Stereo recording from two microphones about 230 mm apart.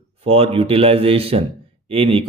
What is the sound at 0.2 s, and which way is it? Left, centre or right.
A man's voice, right.